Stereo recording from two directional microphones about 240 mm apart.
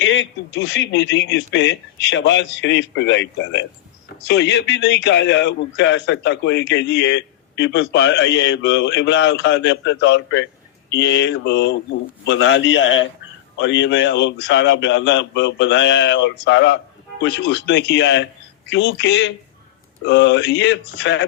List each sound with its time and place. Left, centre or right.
0.0 s a man's voice: left